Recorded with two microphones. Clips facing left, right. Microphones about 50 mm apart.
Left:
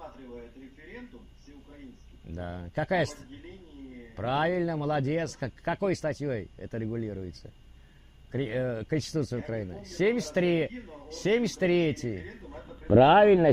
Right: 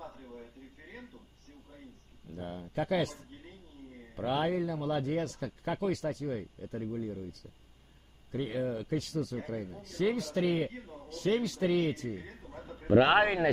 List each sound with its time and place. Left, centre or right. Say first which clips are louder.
2.3 s speech: left 2 dB; left
4.2 s speech: left 3 dB; left
9.4 s speech: left 4 dB; left
11.1 s speech: left 4 dB; left
12.4 s a man's voice: left 3 dB; left
13.0 s a man's voice: left 10 dB; right